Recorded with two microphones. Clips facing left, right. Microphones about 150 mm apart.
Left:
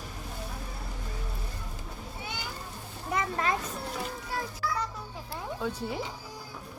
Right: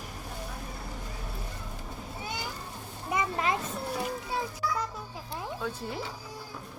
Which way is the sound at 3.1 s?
15° right (ahead or behind).